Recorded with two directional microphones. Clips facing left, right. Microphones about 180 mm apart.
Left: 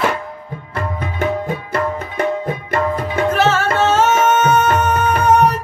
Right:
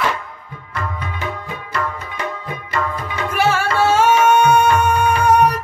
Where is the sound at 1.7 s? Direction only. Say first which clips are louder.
Left 1 dB; 50° left (ahead or behind).